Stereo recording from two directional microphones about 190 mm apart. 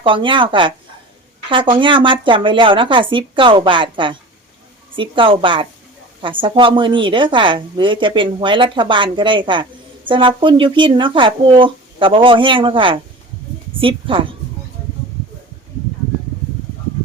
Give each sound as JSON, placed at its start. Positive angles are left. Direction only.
{"t": 0.0, "sound": "a woman's voice", "side_deg": -25}